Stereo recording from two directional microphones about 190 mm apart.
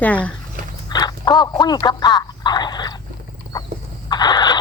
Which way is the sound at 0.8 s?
20° left (ahead or behind).